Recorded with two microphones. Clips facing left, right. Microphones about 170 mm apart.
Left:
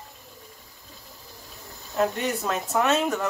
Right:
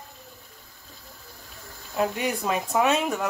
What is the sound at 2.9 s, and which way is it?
Music, centre (ahead or behind).